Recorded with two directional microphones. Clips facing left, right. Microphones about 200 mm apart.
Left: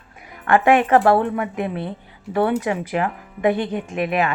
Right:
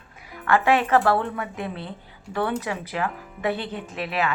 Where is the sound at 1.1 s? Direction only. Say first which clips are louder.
Left 6 dB; 20° left (ahead or behind).